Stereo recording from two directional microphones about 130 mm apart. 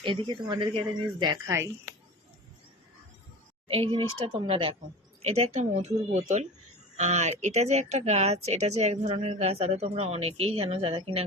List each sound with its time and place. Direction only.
0.0 s speech: 40° right (ahead or behind)
1.5 s speech: 20° right (ahead or behind)
3.7 s speech: 45° right (ahead or behind)
5.2 s a woman's voice: 55° right (ahead or behind)